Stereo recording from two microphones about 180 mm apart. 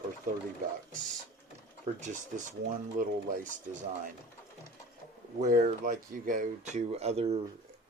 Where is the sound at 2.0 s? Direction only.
45° right (ahead or behind).